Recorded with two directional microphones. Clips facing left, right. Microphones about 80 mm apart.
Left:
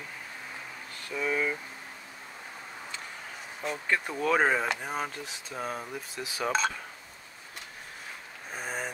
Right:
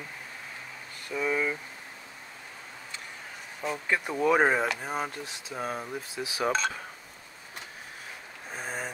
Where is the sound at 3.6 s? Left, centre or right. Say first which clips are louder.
Right 1 dB; centre.